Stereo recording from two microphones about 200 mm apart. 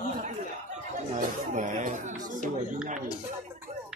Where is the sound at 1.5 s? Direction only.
35° right (ahead or behind).